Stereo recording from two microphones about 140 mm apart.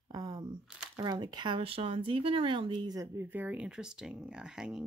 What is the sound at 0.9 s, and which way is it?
Speech, 30° right (ahead or behind).